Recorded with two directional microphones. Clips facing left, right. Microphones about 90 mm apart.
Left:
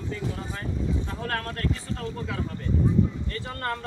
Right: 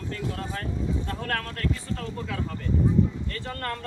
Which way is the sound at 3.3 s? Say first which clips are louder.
Left 1 dB; 15° left (ahead or behind).